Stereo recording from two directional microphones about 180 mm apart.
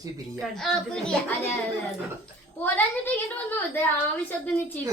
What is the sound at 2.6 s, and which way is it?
A child's voice, 10° left (ahead or behind).